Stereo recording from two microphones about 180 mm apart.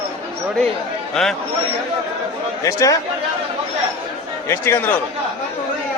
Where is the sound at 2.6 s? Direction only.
20° left (ahead or behind).